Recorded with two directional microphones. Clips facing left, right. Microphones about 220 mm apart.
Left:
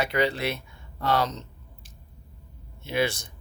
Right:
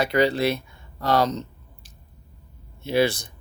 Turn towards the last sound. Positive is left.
turn(degrees=-35)  # may be behind; listen again after turning